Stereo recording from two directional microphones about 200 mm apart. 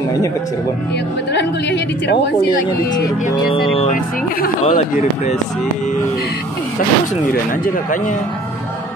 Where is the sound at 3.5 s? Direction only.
30° left (ahead or behind).